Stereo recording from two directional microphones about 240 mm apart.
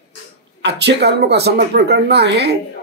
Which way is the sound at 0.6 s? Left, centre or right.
Right.